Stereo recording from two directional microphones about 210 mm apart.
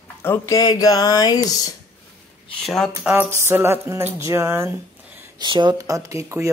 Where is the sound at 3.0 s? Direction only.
10° right (ahead or behind).